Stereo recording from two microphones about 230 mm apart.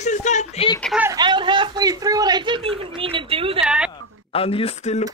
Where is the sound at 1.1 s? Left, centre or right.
Centre.